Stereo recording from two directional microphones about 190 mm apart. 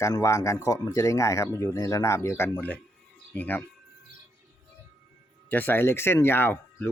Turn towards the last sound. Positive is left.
turn(degrees=10)  # may be behind; listen again after turning